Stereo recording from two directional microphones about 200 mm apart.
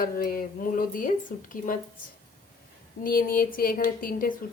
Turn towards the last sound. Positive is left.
turn(degrees=45)  # may be behind; listen again after turning